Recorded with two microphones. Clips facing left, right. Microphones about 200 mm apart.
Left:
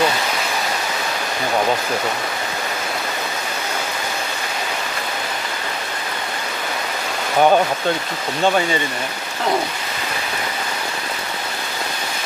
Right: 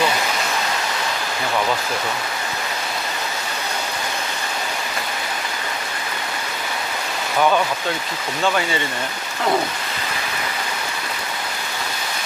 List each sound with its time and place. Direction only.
7.3 s speech: 40° left (ahead or behind)